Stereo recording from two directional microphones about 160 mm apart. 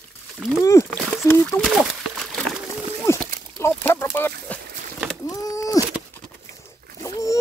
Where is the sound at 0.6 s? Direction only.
20° left (ahead or behind); by 2.6 s centre (ahead or behind).